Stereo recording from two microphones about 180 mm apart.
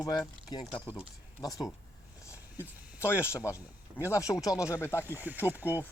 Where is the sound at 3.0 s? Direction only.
15° left (ahead or behind).